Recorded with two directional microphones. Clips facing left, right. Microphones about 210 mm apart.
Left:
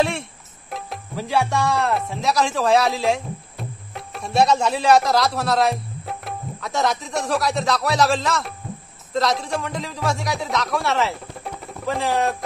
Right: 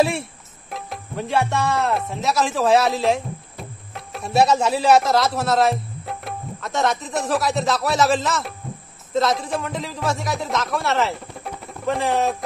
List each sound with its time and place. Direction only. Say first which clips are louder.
0.0 s speech: right 2 dB; 5° right (ahead or behind)